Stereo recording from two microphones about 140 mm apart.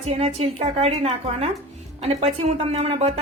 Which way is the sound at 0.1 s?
45° right (ahead or behind).